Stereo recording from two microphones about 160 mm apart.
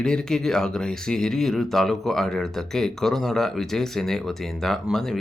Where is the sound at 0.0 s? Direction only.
5° left (ahead or behind).